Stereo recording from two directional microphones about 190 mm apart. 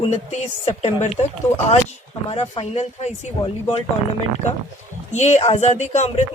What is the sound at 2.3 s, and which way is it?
Speech, 30° left (ahead or behind).